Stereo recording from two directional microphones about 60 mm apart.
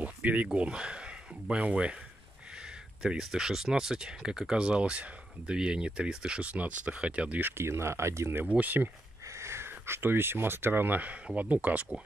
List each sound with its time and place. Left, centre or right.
0.0 s a sound: right
0.6 s speech: centre
3.0 s speech: centre
7.4 s speech: right
8.4 s speech: right
9.3 s speech: right